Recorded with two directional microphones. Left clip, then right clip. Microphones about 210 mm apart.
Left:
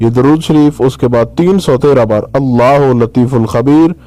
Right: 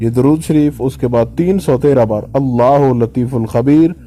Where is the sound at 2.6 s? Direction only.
40° left (ahead or behind).